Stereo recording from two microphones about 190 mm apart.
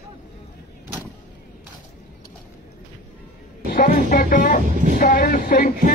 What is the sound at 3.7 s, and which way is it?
Music, 50° left (ahead or behind).